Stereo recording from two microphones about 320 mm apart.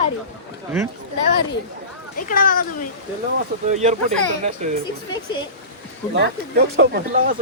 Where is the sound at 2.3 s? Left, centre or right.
Left.